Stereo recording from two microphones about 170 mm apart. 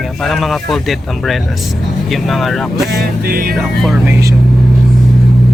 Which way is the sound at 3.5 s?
Centre (ahead or behind).